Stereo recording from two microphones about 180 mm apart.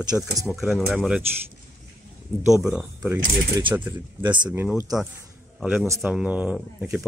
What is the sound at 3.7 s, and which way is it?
Speech, 30° right (ahead or behind).